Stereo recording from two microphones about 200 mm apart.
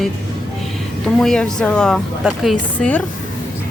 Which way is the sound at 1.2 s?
Centre (ahead or behind).